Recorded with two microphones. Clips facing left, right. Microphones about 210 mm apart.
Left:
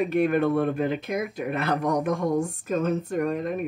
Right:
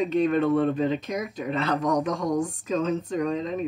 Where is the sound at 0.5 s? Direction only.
10° left (ahead or behind).